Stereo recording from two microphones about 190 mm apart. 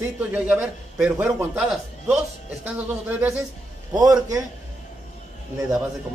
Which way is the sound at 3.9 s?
20° right (ahead or behind).